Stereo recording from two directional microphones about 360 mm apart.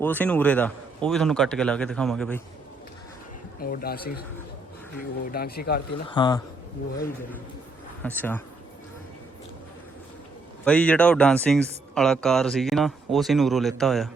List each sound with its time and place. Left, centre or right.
0.0 s speech: centre
3.6 s speech: left
5.3 s speech: left
5.9 s speech: centre
8.0 s speech: centre
10.7 s speech: centre